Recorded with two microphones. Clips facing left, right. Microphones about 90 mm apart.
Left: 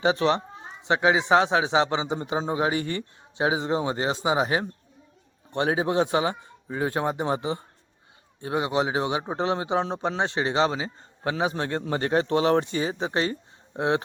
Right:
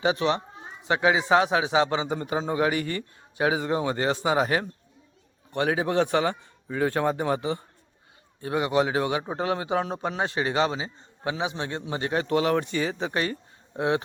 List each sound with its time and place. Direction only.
0.0 s speech: 35° left (ahead or behind)